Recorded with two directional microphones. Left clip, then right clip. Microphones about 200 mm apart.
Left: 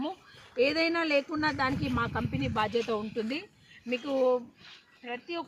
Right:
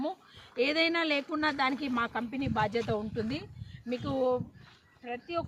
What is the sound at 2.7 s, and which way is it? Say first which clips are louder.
Speech: left 2 dB; 5° right (ahead or behind).